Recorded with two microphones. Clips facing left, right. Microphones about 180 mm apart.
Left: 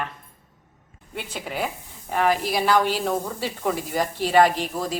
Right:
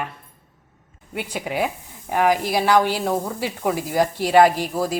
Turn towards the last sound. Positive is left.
turn(degrees=-10)  # may be behind; listen again after turning